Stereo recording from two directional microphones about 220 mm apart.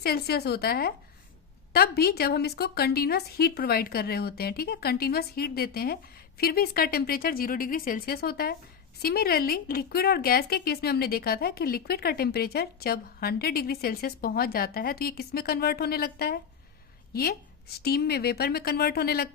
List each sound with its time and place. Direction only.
0.0 s a woman's voice: 45° left (ahead or behind)
17.7 s a woman's voice: 45° left (ahead or behind)